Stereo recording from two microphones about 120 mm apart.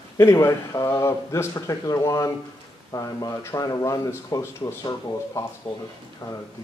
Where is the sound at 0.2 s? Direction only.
20° left (ahead or behind).